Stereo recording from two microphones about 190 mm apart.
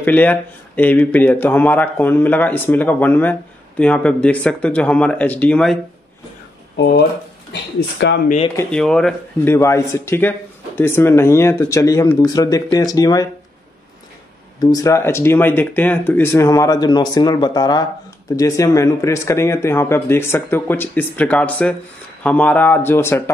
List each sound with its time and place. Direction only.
0.0 s speech: 10° left (ahead or behind)
8.0 s speech: 70° left (ahead or behind)
8.5 s speech: 5° left (ahead or behind); by 13.3 s 20° left (ahead or behind)
14.6 s speech: 20° left (ahead or behind)